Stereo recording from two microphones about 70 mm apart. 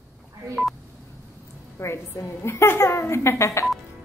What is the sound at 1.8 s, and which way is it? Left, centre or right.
A woman's voice, left.